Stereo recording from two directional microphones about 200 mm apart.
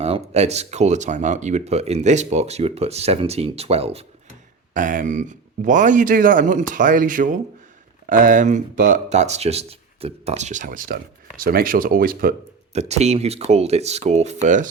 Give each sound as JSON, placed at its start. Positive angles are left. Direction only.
{"t": 0.0, "sound": "speech", "side_deg": -35}
{"t": 4.7, "sound": "speech", "side_deg": -40}
{"t": 12.7, "sound": "speech", "side_deg": -35}